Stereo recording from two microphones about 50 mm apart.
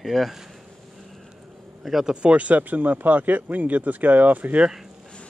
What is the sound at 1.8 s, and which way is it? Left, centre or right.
Speech, centre.